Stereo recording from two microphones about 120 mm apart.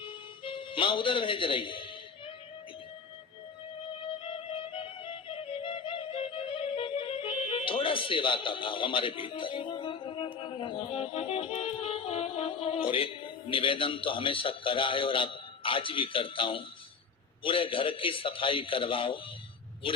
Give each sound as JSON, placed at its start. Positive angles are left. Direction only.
{"t": 0.0, "sound": "music", "side_deg": 45}
{"t": 4.0, "sound": "music", "side_deg": 50}
{"t": 13.5, "sound": "a man's voice", "side_deg": 45}